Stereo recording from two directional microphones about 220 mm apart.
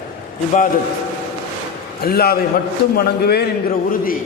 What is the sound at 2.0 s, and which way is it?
A man's voice, 45° left (ahead or behind).